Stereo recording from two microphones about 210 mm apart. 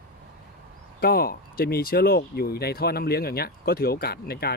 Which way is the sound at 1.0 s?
45° left (ahead or behind).